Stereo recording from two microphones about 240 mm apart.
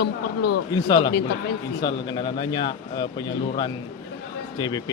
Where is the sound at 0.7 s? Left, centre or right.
Centre.